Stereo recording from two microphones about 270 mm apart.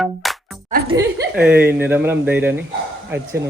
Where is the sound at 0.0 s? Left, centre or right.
Centre.